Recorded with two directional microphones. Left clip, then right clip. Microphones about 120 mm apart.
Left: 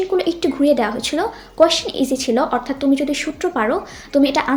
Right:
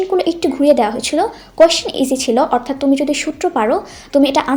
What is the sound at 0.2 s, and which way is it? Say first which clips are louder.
A woman's voice: right 3 dB; 35° right (ahead or behind).